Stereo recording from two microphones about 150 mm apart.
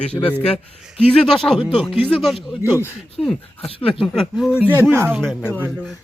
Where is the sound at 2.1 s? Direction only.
Centre (ahead or behind).